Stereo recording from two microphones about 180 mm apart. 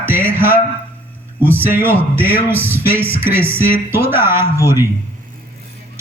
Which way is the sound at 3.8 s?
10° right (ahead or behind).